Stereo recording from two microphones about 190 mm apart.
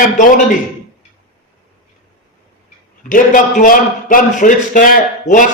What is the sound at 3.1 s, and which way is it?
A man's voice, 45° left (ahead or behind).